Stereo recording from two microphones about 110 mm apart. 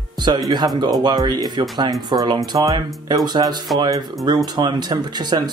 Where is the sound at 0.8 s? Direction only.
40° right (ahead or behind).